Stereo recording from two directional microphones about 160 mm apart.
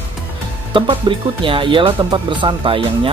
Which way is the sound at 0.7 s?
30° right (ahead or behind).